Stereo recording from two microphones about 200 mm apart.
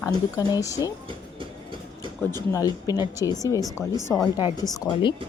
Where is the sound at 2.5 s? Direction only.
20° left (ahead or behind).